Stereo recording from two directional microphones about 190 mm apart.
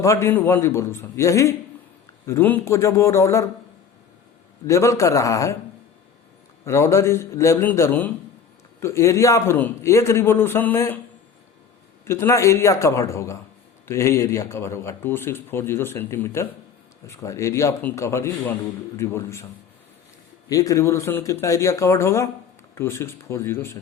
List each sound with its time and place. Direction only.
0.0 s speech: 15° left (ahead or behind)
4.6 s speech: 15° left (ahead or behind)
6.7 s speech: 15° left (ahead or behind)
12.0 s speech: 15° left (ahead or behind)
20.5 s speech: 15° left (ahead or behind)